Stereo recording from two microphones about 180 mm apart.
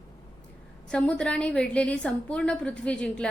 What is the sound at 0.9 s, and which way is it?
A woman's voice, 5° left (ahead or behind).